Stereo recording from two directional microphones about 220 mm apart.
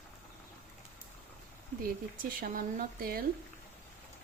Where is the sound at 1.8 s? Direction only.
40° right (ahead or behind).